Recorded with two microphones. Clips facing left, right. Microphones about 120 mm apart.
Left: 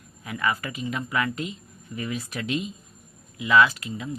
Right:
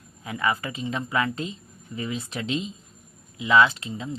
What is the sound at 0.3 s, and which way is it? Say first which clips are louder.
A woman's voice: right 1 dB; 25° right (ahead or behind).